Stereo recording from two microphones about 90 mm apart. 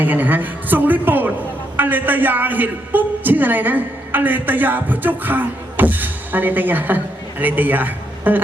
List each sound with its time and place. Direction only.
0.0 s a woman's voice: 20° right (ahead or behind)